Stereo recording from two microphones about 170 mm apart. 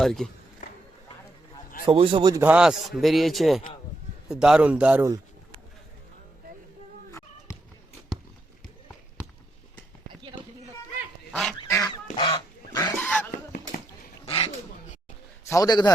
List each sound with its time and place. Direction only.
0.0 s a man's voice: centre (ahead or behind)
0.6 s a sound: 50° left (ahead or behind)
1.9 s a man's voice: 30° right (ahead or behind)
2.3 s a man's voice: 10° right (ahead or behind)
11.3 s goose: centre (ahead or behind)
12.1 s goose: 25° left (ahead or behind)
13.0 s a sound: 10° left (ahead or behind)
14.3 s dog: 30° left (ahead or behind)
15.4 s a man's voice: 20° left (ahead or behind)